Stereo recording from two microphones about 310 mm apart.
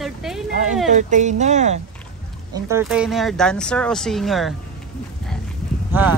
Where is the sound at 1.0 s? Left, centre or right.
Right.